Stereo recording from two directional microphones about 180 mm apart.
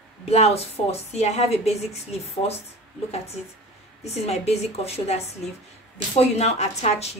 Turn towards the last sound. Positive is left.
turn(degrees=35)  # may be behind; listen again after turning